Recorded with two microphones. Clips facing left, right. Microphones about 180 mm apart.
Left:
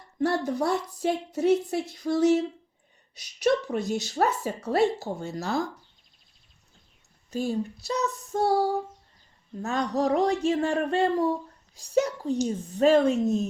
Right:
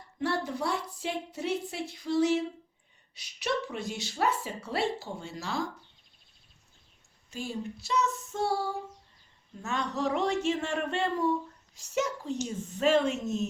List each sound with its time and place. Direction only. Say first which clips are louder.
0.2 s speech: left 6 dB; 40° left (ahead or behind)
7.3 s speech: left 8 dB; 40° left (ahead or behind)